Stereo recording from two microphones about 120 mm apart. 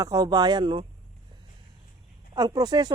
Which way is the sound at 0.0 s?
30° right (ahead or behind).